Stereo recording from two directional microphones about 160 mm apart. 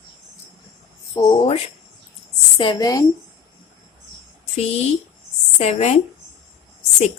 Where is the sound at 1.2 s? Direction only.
20° left (ahead or behind).